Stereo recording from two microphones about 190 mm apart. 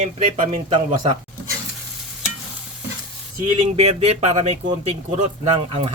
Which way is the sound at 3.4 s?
30° right (ahead or behind).